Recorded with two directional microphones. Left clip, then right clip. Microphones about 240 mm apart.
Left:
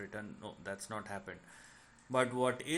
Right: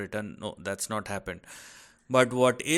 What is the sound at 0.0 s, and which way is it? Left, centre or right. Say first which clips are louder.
Speech: right 11 dB; right.